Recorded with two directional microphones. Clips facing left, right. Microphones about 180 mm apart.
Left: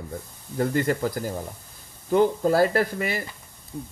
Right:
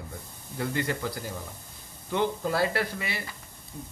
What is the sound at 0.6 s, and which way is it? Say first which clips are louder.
Speech: left 7 dB; 45° left (ahead or behind).